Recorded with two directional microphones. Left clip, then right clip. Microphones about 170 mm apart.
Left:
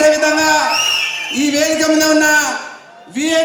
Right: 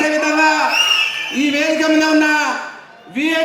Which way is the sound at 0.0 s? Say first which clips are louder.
Left 3 dB; 10° left (ahead or behind).